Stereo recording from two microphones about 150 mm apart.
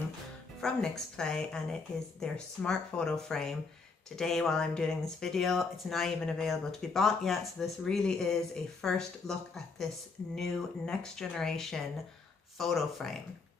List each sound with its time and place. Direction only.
0.6 s speech: 5° left (ahead or behind)